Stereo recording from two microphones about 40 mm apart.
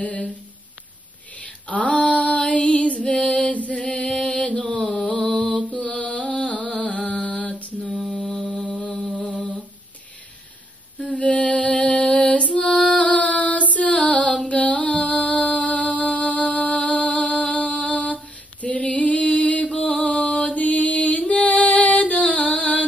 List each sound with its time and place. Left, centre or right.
0.0 s a sound: left
1.3 s female singing: left
3.7 s music: left
4.9 s a sound: left
5.9 s music: left
7.2 s female singing: left
7.9 s mantra: centre
8.6 s mantra: left
11.0 s music: left